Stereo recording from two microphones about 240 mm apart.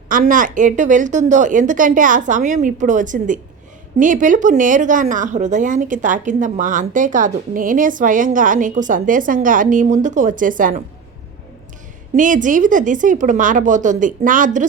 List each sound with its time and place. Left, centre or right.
0.1 s a woman's voice: right
12.1 s a woman's voice: right